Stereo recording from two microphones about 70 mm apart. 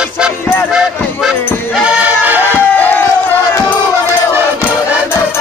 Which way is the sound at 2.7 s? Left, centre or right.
Left.